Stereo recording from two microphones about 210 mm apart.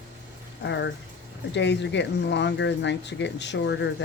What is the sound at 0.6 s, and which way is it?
Speech, 55° left (ahead or behind).